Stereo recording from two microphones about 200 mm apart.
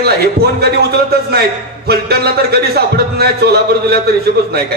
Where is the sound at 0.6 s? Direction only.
50° right (ahead or behind).